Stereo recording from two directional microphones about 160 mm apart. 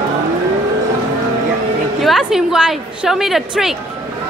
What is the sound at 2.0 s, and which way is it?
A woman's voice, centre (ahead or behind).